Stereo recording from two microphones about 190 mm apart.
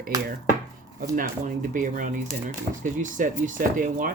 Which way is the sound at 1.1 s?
45° right (ahead or behind).